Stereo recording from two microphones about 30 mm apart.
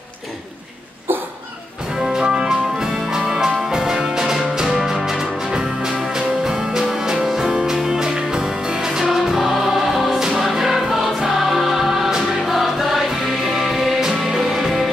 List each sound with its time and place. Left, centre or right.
2.1 s music: centre
9.1 s music: centre